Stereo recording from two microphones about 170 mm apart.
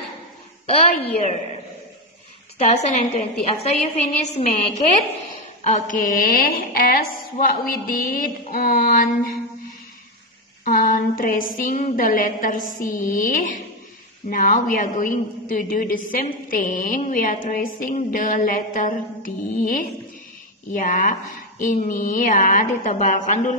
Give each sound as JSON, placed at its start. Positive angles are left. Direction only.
{"t": 0.7, "sound": "a woman's voice", "side_deg": 40}
{"t": 2.6, "sound": "a woman's voice", "side_deg": 40}
{"t": 5.6, "sound": "a sound", "side_deg": 50}
{"t": 10.6, "sound": "a woman's voice", "side_deg": 55}